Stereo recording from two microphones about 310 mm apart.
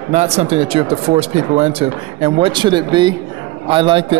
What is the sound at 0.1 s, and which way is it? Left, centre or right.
Speech, right.